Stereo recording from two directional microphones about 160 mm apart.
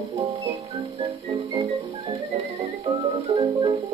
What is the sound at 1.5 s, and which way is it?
Music, 20° right (ahead or behind).